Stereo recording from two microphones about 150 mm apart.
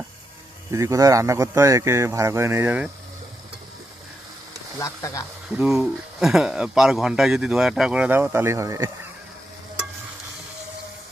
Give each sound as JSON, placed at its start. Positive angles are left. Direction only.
{"t": 0.7, "sound": "speech", "side_deg": -20}
{"t": 4.8, "sound": "speech", "side_deg": 20}
{"t": 5.5, "sound": "speech", "side_deg": -5}